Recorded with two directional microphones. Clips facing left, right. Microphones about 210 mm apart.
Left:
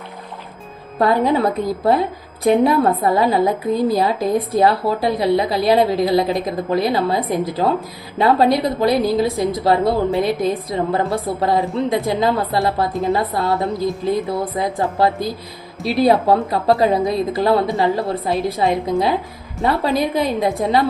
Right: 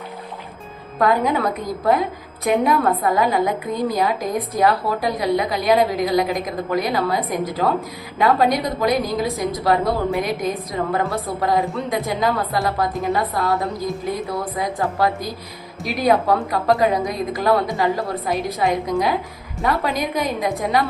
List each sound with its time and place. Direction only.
0.9 s a woman's voice: 30° left (ahead or behind)